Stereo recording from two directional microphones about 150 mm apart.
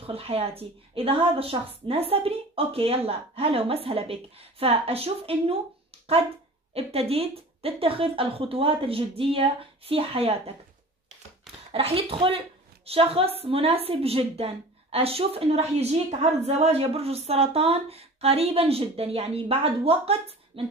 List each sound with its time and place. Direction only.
0.0 s a woman's voice: 40° right (ahead or behind)
6.7 s a woman's voice: 40° right (ahead or behind)
11.7 s a woman's voice: 40° right (ahead or behind)